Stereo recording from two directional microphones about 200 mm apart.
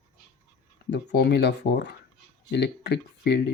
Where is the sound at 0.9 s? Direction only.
55° left (ahead or behind).